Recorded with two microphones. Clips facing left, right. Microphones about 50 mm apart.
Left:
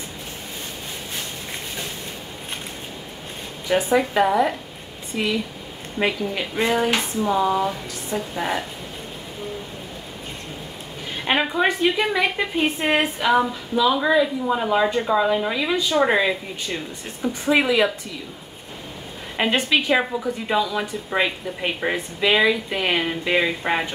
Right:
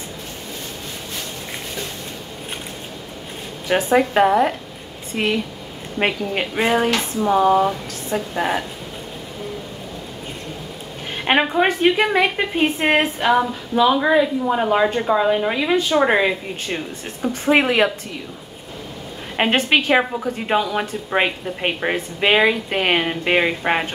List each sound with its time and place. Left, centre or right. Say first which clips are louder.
3.6 s a woman's voice: right 2 dB; right
11.2 s a woman's voice: right 3 dB; right
16.6 s a woman's voice: right 2 dB; right
19.3 s a woman's voice: right 3 dB; right